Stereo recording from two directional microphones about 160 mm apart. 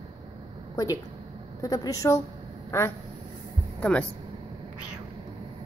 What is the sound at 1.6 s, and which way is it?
Speech, 20° left (ahead or behind).